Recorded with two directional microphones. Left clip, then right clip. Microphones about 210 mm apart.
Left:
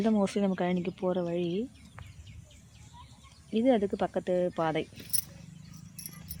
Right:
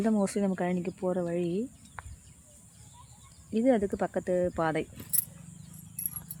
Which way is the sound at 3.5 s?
5° left (ahead or behind).